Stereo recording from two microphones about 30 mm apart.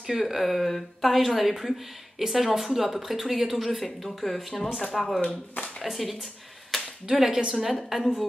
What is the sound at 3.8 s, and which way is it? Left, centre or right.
Speech, centre.